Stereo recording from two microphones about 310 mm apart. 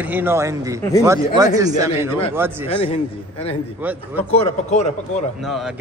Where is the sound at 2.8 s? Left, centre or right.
Centre.